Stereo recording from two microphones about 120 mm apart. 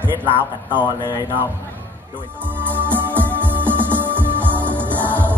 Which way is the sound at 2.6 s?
15° right (ahead or behind).